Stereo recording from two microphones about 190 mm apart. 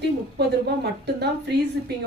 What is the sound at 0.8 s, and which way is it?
Speech, 60° right (ahead or behind).